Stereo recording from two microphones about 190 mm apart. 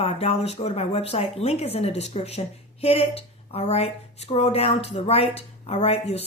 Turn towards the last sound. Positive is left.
turn(degrees=30)  # may be behind; listen again after turning